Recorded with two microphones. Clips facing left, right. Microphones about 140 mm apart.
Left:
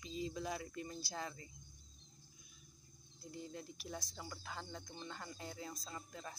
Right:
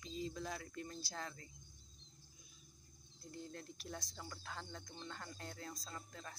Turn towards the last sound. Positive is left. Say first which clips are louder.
# left 2 dB
turn(degrees=10)  # may be behind; listen again after turning